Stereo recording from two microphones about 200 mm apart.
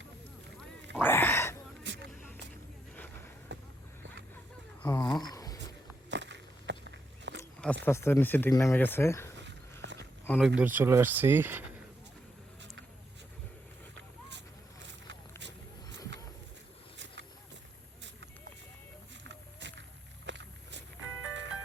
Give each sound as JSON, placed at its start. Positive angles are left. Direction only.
{"t": 0.9, "sound": "a sound", "side_deg": 10}
{"t": 1.8, "sound": "vehicle", "side_deg": -60}
{"t": 3.5, "sound": "vehicle", "side_deg": -65}
{"t": 4.8, "sound": "speech", "side_deg": 20}
{"t": 5.2, "sound": "a sound", "side_deg": 20}
{"t": 6.1, "sound": "walk", "side_deg": -60}
{"t": 7.9, "sound": "speech", "side_deg": 15}
{"t": 9.3, "sound": "a sound", "side_deg": -60}
{"t": 10.2, "sound": "speech", "side_deg": 5}
{"t": 10.6, "sound": "speech", "side_deg": -10}
{"t": 13.9, "sound": "a sound", "side_deg": -60}
{"t": 15.4, "sound": "vehicle", "side_deg": -60}
{"t": 19.2, "sound": "walk", "side_deg": -60}
{"t": 20.2, "sound": "music", "side_deg": -60}